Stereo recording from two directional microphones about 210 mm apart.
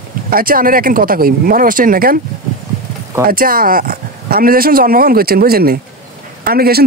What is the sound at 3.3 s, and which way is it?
Speech, 45° right (ahead or behind).